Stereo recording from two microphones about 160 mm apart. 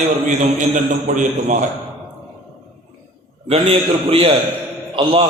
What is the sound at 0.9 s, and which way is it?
Speech, 50° right (ahead or behind).